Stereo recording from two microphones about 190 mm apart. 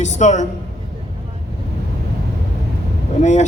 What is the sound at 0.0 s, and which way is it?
Speech, 40° left (ahead or behind).